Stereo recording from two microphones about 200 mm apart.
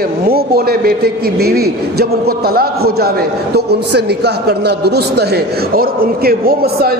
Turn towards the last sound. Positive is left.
turn(degrees=-50)  # may be behind; listen again after turning